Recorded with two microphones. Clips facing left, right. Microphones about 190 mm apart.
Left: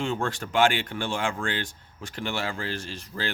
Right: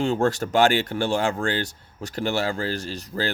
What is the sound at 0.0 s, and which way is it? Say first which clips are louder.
Speech: right 7 dB; 40° right (ahead or behind).